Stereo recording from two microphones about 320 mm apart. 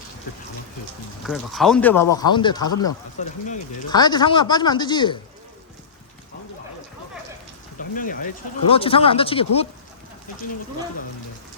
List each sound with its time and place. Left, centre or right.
1.2 s speech: centre
7.8 s speech: left